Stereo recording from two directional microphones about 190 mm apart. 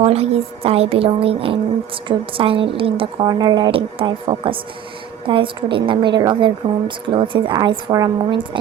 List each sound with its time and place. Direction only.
0.0 s a woman's voice: 30° right (ahead or behind)